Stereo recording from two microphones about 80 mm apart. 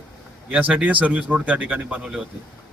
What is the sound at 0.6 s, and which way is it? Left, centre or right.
A man's voice, centre.